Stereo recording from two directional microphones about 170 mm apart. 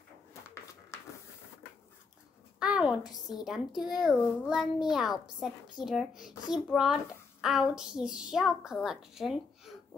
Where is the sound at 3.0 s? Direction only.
25° left (ahead or behind).